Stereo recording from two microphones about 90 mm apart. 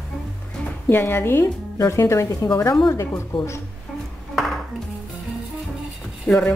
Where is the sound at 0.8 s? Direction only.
20° left (ahead or behind).